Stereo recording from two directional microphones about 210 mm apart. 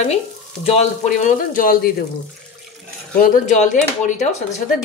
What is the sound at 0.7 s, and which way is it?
Speech, 35° left (ahead or behind).